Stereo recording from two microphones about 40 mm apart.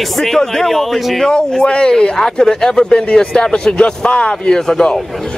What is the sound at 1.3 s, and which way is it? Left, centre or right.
Speech, left.